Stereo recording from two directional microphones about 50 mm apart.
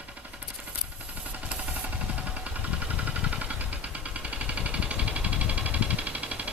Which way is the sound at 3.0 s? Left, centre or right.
Right.